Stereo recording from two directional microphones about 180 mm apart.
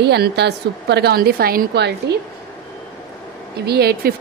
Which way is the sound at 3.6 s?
60° right (ahead or behind).